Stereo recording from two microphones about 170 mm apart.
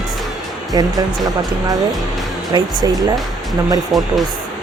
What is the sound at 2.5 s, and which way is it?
Speech, 25° right (ahead or behind).